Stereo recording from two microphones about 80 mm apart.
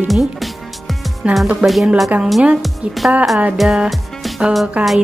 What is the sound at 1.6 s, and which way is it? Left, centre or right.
Speech, centre.